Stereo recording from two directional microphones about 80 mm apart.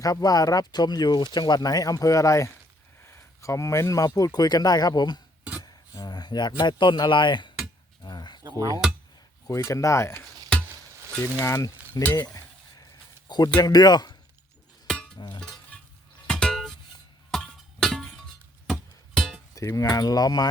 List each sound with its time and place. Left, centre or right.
0.0 s speech: left
5.5 s a sound: left
6.6 s speech: left
8.0 s a sound: left
8.5 s speech: right
9.5 s speech: left
11.4 s speech: left
12.8 s a sound: left
13.6 s speech: left
14.8 s music: centre
15.4 s a sound: centre
16.2 s music: centre
19.5 s speech: left